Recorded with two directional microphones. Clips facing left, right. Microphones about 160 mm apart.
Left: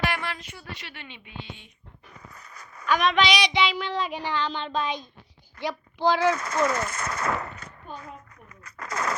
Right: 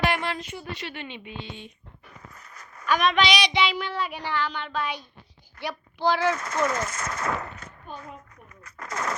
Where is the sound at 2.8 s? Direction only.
15° right (ahead or behind).